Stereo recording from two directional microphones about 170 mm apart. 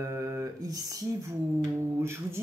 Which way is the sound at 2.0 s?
15° right (ahead or behind).